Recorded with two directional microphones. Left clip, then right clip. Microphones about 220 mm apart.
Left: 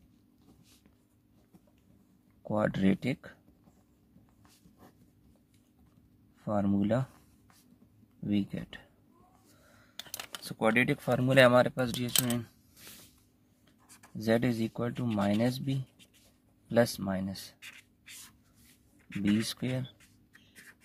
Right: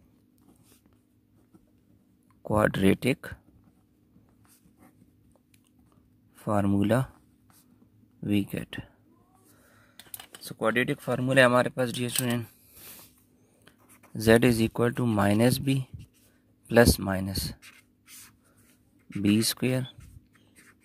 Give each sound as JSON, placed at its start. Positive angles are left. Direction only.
{"t": 2.4, "sound": "speech", "side_deg": -30}
{"t": 6.3, "sound": "speech", "side_deg": -30}
{"t": 8.2, "sound": "speech", "side_deg": -25}
{"t": 9.9, "sound": "computer keyboard", "side_deg": 25}
{"t": 10.4, "sound": "speech", "side_deg": -20}
{"t": 13.8, "sound": "writing", "side_deg": 0}
{"t": 14.1, "sound": "speech", "side_deg": -35}
{"t": 17.6, "sound": "writing", "side_deg": 0}
{"t": 19.4, "sound": "speech", "side_deg": -30}